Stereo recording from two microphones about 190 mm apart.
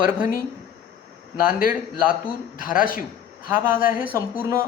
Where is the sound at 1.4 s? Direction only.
50° left (ahead or behind).